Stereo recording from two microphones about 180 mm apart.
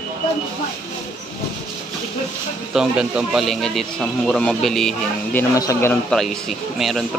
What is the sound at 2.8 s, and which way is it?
Speech, 5° right (ahead or behind).